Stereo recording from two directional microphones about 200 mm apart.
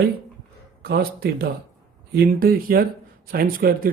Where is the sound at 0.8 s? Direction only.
50° right (ahead or behind).